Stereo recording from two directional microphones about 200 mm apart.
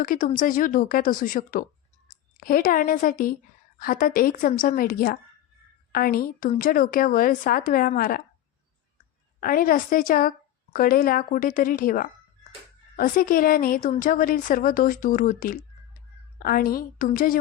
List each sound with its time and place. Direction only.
0.0 s a woman's voice: 45° left (ahead or behind)
9.4 s a woman's voice: 45° left (ahead or behind)